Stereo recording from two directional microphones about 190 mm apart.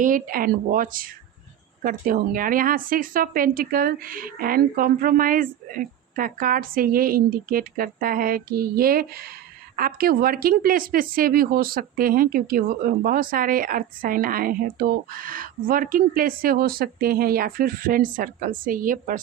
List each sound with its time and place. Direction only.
0.0 s a woman's voice: 45° right (ahead or behind)